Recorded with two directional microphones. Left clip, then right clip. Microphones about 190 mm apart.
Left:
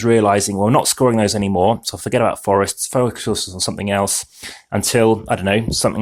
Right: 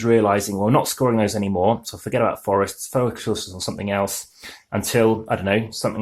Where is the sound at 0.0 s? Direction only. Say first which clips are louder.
Left 3 dB; 35° left (ahead or behind).